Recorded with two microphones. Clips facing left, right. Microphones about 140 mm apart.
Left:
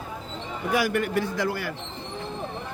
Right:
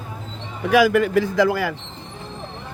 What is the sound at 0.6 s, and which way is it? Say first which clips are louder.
Speech: right 9 dB; 90° right.